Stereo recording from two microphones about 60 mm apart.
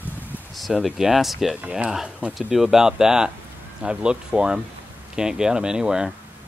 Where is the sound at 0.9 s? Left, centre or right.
Centre.